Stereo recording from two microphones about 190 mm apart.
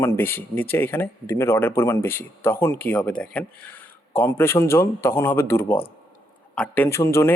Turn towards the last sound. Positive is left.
turn(degrees=15)  # may be behind; listen again after turning